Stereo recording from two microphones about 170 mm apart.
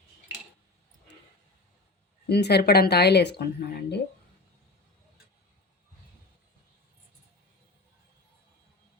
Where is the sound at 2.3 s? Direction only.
75° left (ahead or behind).